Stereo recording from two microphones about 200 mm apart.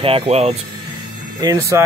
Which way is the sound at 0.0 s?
30° right (ahead or behind).